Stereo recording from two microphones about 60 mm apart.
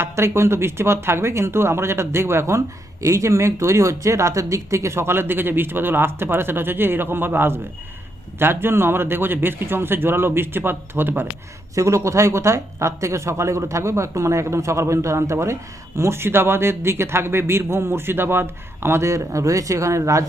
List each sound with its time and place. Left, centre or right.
0.0 s a man's voice: right
11.7 s speech: right